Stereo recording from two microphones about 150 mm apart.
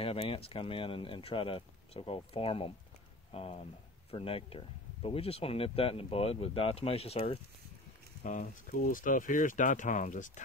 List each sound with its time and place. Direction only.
0.0 s speech: 40° left (ahead or behind)
8.2 s speech: 60° left (ahead or behind)